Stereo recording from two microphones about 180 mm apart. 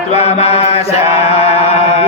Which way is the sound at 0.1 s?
35° left (ahead or behind).